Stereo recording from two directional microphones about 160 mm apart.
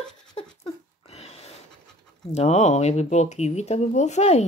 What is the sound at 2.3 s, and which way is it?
Speech, 45° left (ahead or behind).